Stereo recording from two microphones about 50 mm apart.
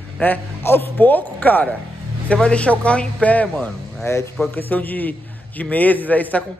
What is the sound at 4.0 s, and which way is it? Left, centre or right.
Speech, left.